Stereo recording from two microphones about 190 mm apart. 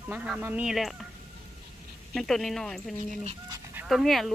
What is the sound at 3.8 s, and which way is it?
Speech, centre (ahead or behind).